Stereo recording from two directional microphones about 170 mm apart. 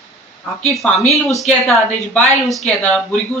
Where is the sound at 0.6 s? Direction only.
Centre (ahead or behind).